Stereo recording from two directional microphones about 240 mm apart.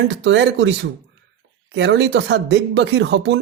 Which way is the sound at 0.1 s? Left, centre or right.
Right.